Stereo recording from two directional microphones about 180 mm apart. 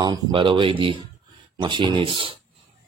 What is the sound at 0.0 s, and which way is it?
Speech, 25° right (ahead or behind).